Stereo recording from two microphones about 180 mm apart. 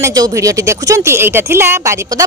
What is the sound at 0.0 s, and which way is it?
A woman's voice, 20° right (ahead or behind).